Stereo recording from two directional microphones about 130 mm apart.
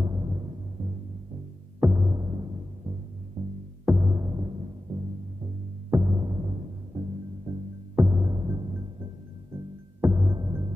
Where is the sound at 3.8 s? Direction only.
25° right (ahead or behind).